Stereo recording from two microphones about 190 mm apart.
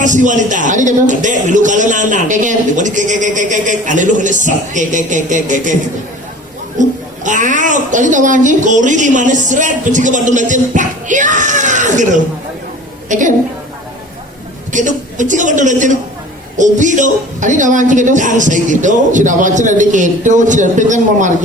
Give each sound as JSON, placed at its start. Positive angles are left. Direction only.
{"t": 0.0, "sound": "a woman's voice", "side_deg": -40}
{"t": 7.3, "sound": "a woman's voice", "side_deg": -40}
{"t": 14.7, "sound": "a woman's voice", "side_deg": -40}